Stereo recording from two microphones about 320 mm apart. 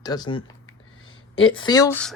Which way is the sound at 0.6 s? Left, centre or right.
Left.